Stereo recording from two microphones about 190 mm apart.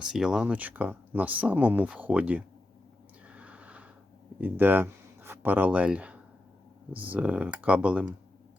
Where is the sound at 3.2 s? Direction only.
5° right (ahead or behind).